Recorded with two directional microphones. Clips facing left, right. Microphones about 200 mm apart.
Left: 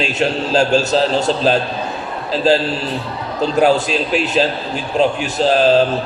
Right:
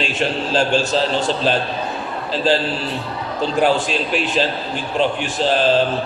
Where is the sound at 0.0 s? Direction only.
40° left (ahead or behind).